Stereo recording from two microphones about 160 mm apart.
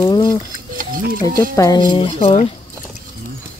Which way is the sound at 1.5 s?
25° left (ahead or behind).